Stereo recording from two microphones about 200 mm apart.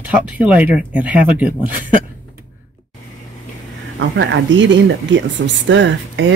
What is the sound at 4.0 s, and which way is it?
Speech, 65° right (ahead or behind).